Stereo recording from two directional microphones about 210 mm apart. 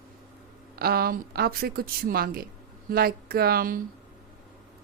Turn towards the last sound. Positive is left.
turn(degrees=-45)  # may be behind; listen again after turning